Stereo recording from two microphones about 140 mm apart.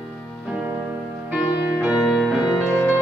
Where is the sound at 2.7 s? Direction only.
20° left (ahead or behind).